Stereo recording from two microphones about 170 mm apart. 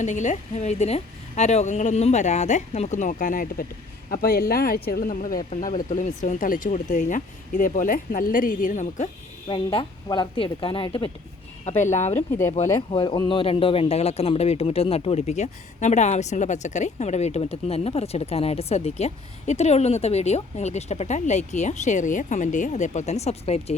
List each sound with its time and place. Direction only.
0.0 s speech: 45° left (ahead or behind)
9.5 s a man's voice: 30° left (ahead or behind)
11.8 s speech: 45° left (ahead or behind)
12.9 s a man's voice: 30° left (ahead or behind)